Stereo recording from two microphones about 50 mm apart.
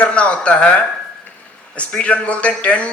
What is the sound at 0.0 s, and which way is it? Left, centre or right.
Speech, left.